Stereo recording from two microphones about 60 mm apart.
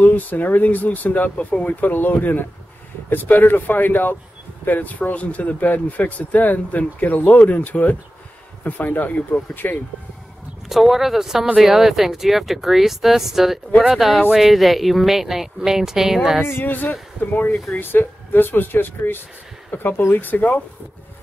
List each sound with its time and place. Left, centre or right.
0.0 s speech: left
10.7 s a woman's voice: centre
16.4 s speech: left